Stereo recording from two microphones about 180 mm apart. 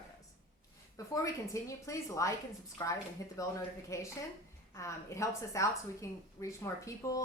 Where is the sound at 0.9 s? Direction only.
15° left (ahead or behind).